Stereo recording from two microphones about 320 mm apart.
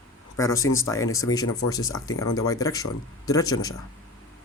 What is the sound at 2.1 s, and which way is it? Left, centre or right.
Speech, left.